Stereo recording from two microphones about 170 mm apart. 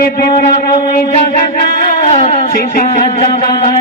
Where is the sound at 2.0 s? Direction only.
35° left (ahead or behind).